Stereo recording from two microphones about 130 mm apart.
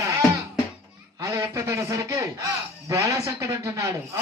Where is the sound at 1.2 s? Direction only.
25° right (ahead or behind).